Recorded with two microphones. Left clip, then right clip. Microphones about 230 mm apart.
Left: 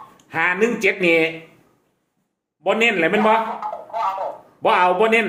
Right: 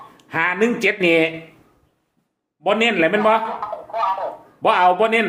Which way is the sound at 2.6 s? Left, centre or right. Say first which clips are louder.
Right 1 dB; centre.